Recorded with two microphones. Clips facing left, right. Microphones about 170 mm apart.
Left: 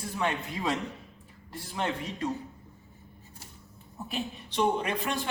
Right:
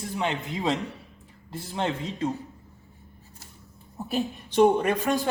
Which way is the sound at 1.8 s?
30° right (ahead or behind).